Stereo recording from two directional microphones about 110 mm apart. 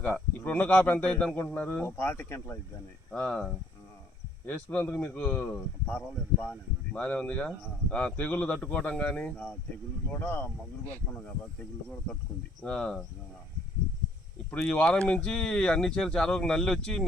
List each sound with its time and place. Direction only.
0.0 s speech: 15° left (ahead or behind)
3.1 s speech: 10° left (ahead or behind)
12.6 s speech: 10° left (ahead or behind)
14.5 s speech: 10° left (ahead or behind)